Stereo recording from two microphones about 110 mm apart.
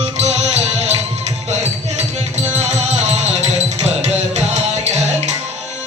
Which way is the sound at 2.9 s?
85° right.